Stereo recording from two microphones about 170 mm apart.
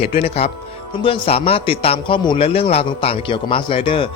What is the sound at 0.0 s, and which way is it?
A man's voice, 35° left (ahead or behind).